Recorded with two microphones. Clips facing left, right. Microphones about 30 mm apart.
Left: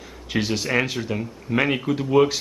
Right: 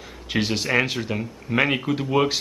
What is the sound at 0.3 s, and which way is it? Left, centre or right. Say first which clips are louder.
Speech: right 1 dB; centre.